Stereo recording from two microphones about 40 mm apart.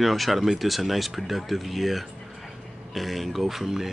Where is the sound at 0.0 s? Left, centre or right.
Centre.